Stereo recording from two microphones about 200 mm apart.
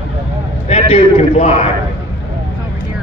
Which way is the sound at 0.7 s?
30° left (ahead or behind).